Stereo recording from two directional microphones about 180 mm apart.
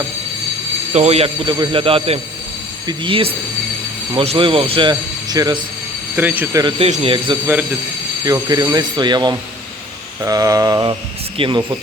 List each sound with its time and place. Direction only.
0.9 s speech: 35° right (ahead or behind)
6.1 s speech: 10° right (ahead or behind)
6.6 s speech: 30° right (ahead or behind)
8.2 s speech: 20° right (ahead or behind)